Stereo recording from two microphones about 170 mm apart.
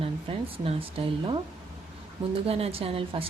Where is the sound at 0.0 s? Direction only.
35° right (ahead or behind).